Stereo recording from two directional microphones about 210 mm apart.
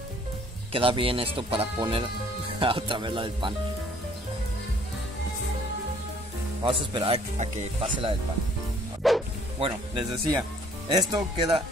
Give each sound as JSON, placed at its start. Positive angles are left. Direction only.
{"t": 0.7, "sound": "speech", "side_deg": -25}
{"t": 6.6, "sound": "speech", "side_deg": -25}
{"t": 9.0, "sound": "bow-wow", "side_deg": 0}
{"t": 9.6, "sound": "speech", "side_deg": -25}